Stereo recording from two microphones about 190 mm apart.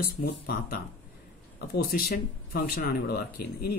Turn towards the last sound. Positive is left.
turn(degrees=55)  # may be behind; listen again after turning